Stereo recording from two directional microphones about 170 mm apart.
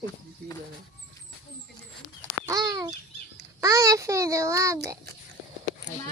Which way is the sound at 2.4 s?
20° right (ahead or behind).